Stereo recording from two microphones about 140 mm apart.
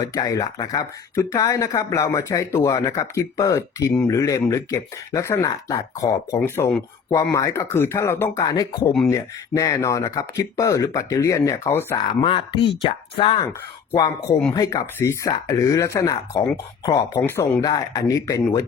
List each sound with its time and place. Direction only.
0.0 s speech: 25° left (ahead or behind)
6.4 s speech: 15° left (ahead or behind)
12.2 s speech: 35° left (ahead or behind)
14.5 s speech: 25° left (ahead or behind)
17.6 s speech: 25° left (ahead or behind)